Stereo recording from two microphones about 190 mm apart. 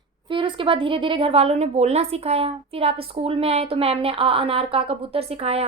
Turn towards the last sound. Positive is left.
turn(degrees=-30)  # may be behind; listen again after turning